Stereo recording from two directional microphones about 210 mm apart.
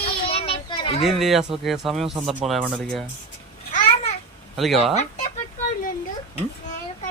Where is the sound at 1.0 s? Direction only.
Centre (ahead or behind).